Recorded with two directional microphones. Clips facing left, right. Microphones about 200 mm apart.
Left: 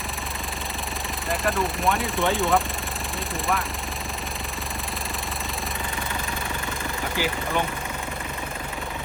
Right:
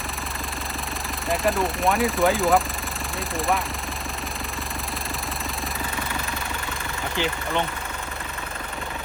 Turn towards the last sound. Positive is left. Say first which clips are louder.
# right 1 dB
turn(degrees=10)  # may be behind; listen again after turning